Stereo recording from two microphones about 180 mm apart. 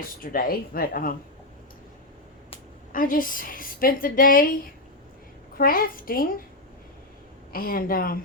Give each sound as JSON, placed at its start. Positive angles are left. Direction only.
{"t": 0.2, "sound": "speech", "side_deg": 55}
{"t": 2.9, "sound": "a woman's voice", "side_deg": 50}
{"t": 5.5, "sound": "a woman's voice", "side_deg": 55}
{"t": 7.5, "sound": "a woman's voice", "side_deg": 55}